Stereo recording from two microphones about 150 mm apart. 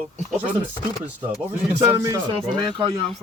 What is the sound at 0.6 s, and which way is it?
Speech, 10° right (ahead or behind).